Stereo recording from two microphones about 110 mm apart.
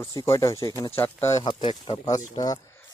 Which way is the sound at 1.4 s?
50° left (ahead or behind).